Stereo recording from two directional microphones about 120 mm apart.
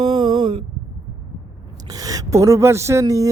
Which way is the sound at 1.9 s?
30° right (ahead or behind).